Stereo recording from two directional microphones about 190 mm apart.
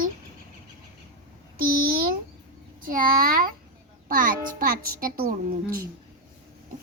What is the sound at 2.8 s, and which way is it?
A child's voice, 50° right (ahead or behind).